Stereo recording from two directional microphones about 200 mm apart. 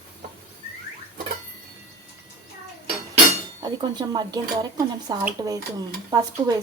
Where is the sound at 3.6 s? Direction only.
20° right (ahead or behind).